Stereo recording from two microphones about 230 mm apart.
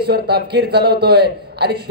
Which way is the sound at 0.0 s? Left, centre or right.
Right.